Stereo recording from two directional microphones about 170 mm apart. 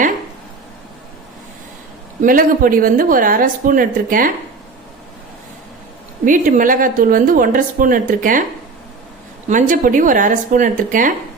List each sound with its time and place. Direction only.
2.2 s speech: 55° right (ahead or behind)
6.2 s a woman's voice: 50° right (ahead or behind)
9.5 s a woman's voice: 50° right (ahead or behind)